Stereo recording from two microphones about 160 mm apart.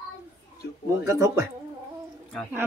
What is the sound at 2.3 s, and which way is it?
Speech, centre (ahead or behind).